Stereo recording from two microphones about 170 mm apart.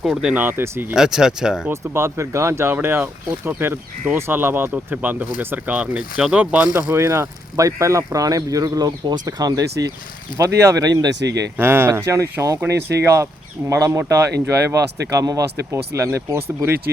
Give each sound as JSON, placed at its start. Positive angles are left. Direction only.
{"t": 0.0, "sound": "speech", "side_deg": -5}
{"t": 1.7, "sound": "speech", "side_deg": -15}
{"t": 11.1, "sound": "speech", "side_deg": -90}
{"t": 11.3, "sound": "speech", "side_deg": -15}